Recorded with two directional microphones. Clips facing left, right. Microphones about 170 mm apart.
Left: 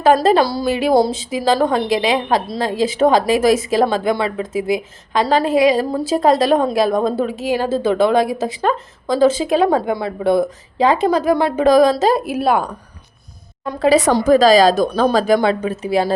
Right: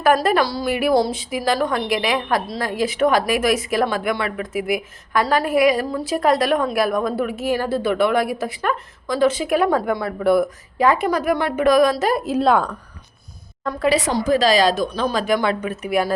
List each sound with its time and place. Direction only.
0.0 s a woman's voice: 25° left (ahead or behind)
12.2 s speech: 5° left (ahead or behind)
14.3 s speech: 35° left (ahead or behind)
14.8 s speech: 50° left (ahead or behind)
15.1 s a woman's voice: 35° left (ahead or behind)